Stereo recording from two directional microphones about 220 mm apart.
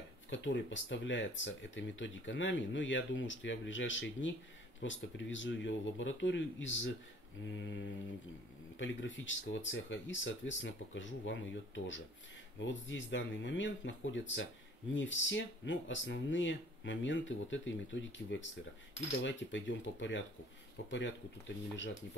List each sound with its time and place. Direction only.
0.3 s speech: 55° left (ahead or behind)